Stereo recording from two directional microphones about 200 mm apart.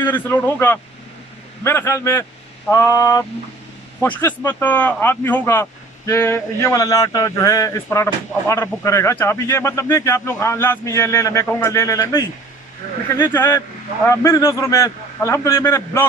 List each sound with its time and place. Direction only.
0.0 s speech: 10° left (ahead or behind)